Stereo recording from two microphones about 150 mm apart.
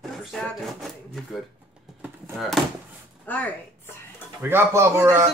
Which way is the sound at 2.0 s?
Centre (ahead or behind).